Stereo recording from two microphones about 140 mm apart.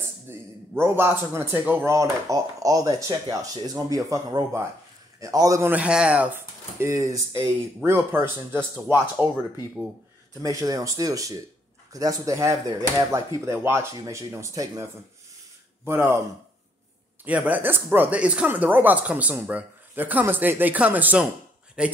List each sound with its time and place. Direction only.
0.0 s a man's voice: 15° right (ahead or behind)
5.7 s speech: 10° right (ahead or behind)
10.4 s a man's voice: 25° right (ahead or behind)
17.2 s speech: 10° right (ahead or behind)